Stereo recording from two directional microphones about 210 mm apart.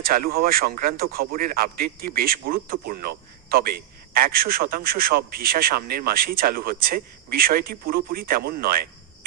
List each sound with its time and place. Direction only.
0.0 s a man's voice: 45° right (ahead or behind)